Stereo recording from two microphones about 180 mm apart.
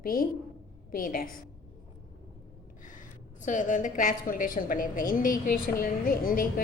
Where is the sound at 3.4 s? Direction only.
45° left (ahead or behind).